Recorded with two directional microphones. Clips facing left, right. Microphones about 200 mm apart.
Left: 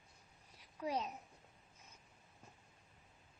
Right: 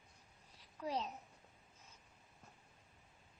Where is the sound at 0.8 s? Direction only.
10° left (ahead or behind).